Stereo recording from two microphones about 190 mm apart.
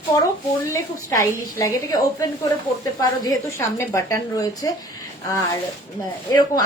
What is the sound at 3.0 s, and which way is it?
A woman's voice, 15° left (ahead or behind).